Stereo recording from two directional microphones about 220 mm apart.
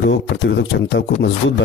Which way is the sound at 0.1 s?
55° left (ahead or behind).